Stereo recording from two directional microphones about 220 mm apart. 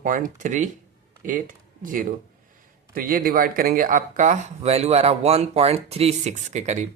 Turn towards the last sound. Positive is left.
turn(degrees=-35)  # may be behind; listen again after turning